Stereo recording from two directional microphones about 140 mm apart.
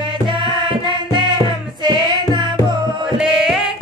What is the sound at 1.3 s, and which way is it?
Music, 30° right (ahead or behind).